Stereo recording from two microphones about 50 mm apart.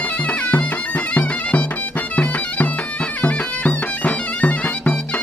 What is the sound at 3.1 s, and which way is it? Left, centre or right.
Bagpipes, left.